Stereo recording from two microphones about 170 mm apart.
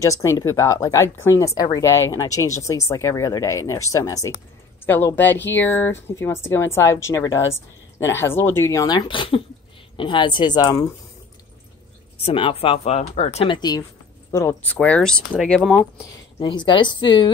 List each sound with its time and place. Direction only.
0.0 s speech: 15° left (ahead or behind)
12.2 s speech: 30° left (ahead or behind)
13.6 s speech: 25° left (ahead or behind); by 15.9 s 5° left (ahead or behind)
16.3 s speech: 30° left (ahead or behind)